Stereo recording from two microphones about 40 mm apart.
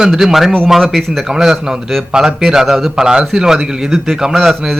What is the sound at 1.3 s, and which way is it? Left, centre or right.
A man's voice, centre.